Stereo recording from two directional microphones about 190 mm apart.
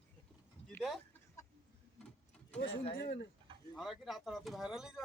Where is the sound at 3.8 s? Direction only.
Centre (ahead or behind).